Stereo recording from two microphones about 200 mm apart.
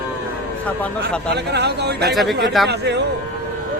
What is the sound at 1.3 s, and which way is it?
Speech, 55° right (ahead or behind).